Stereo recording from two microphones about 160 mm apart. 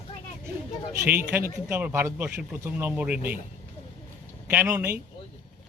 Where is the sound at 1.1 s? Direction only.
15° right (ahead or behind).